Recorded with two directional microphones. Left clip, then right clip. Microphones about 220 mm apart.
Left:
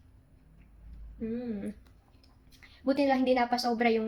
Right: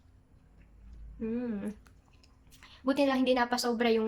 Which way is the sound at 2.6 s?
20° right (ahead or behind).